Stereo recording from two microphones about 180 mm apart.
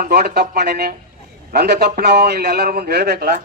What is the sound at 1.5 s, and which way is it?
A man's voice, 65° right (ahead or behind).